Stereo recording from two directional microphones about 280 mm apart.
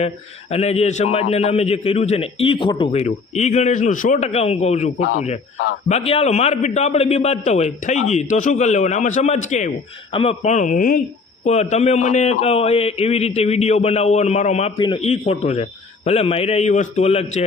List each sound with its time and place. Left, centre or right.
0.5 s a man's voice: left